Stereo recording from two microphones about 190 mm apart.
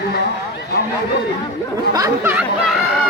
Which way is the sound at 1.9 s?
15° right (ahead or behind).